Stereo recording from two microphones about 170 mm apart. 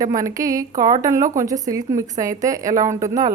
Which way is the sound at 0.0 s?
20° right (ahead or behind).